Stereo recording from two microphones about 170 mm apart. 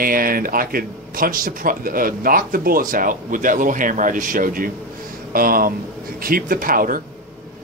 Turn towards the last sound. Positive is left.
turn(degrees=-55)  # may be behind; listen again after turning